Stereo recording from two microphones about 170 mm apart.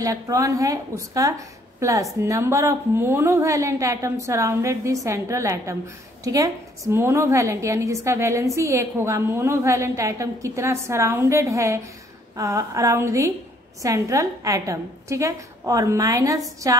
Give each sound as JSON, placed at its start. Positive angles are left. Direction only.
{"t": 0.0, "sound": "a woman's voice", "side_deg": -20}